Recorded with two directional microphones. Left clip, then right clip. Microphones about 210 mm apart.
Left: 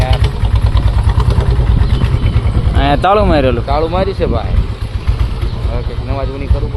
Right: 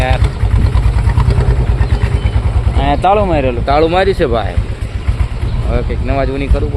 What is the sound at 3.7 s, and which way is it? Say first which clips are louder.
Speech: right 4 dB; 55° right (ahead or behind).